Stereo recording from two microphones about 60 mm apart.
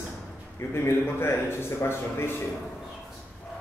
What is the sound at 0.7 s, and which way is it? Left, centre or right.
A man's voice, left.